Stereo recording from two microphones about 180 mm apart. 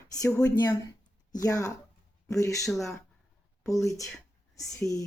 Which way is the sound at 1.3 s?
20° left (ahead or behind).